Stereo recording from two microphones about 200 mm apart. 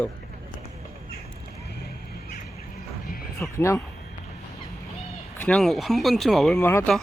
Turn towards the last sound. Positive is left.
turn(degrees=10)  # may be behind; listen again after turning